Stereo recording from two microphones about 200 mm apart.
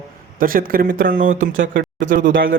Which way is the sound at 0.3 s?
45° right (ahead or behind).